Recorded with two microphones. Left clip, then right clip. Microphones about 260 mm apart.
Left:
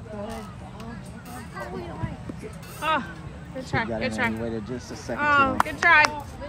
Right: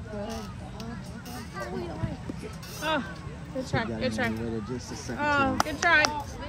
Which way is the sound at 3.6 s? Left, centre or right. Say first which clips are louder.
Left 3 dB; left.